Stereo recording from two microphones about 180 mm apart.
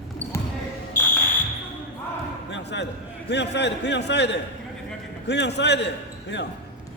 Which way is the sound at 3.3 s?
70° left (ahead or behind).